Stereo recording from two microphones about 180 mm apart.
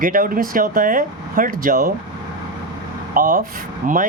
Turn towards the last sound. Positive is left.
turn(degrees=-50)  # may be behind; listen again after turning